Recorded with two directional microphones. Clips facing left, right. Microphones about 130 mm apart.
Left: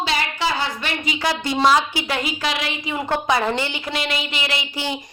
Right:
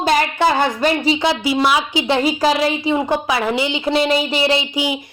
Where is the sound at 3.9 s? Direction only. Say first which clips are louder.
Right 10 dB; 35° right (ahead or behind).